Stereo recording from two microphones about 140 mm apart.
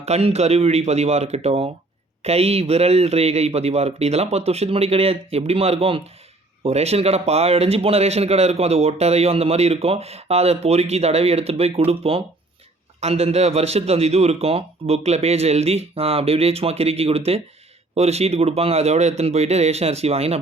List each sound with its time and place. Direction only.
0.0 s speech: 50° right (ahead or behind)